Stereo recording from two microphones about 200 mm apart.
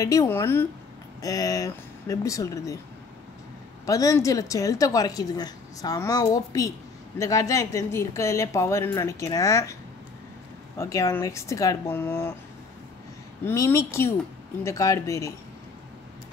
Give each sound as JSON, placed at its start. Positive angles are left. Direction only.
{"t": 0.0, "sound": "a woman's voice", "side_deg": 15}
{"t": 3.8, "sound": "a woman's voice", "side_deg": 15}
{"t": 10.8, "sound": "a woman's voice", "side_deg": 15}
{"t": 13.5, "sound": "a woman's voice", "side_deg": 15}